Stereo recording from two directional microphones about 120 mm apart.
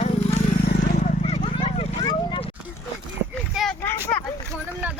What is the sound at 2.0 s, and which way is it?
Vehicle, 35° left (ahead or behind).